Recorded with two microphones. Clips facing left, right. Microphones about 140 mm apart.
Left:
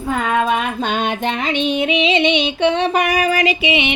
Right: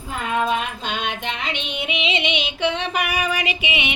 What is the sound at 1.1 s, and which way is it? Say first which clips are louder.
Female singing: left 8 dB; 45° left (ahead or behind).